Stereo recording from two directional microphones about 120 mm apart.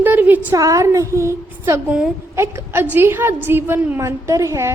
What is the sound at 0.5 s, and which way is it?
A woman's voice, 30° right (ahead or behind).